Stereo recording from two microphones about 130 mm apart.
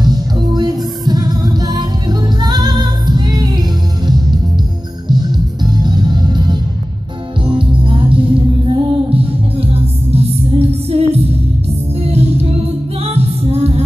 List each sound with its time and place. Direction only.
0.0 s music: 30° right (ahead or behind)
5.0 s music: 35° right (ahead or behind); by 13.8 s 55° right (ahead or behind)